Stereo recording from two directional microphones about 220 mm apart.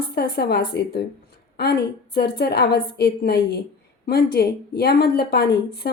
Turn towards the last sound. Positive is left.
turn(degrees=45)  # may be behind; listen again after turning